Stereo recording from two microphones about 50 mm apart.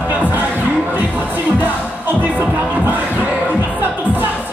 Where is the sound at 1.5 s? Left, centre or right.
Right.